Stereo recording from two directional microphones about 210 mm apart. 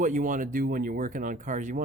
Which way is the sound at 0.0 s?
40° right (ahead or behind).